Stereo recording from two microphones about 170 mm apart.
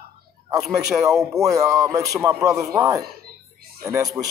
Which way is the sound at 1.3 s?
20° right (ahead or behind).